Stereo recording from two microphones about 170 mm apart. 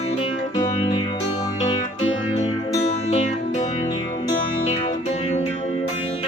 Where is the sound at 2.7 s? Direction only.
40° left (ahead or behind).